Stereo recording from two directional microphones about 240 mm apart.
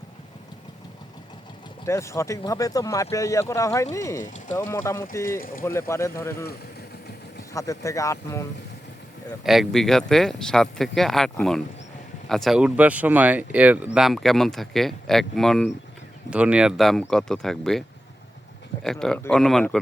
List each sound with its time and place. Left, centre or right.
1.9 s speech: centre
4.2 s speech: left
4.5 s speech: centre
7.5 s speech: centre
9.4 s speech: centre